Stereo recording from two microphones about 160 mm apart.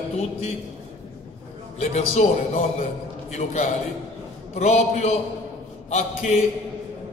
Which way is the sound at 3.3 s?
45° left (ahead or behind).